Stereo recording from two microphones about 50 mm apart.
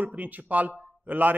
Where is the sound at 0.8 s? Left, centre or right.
Right.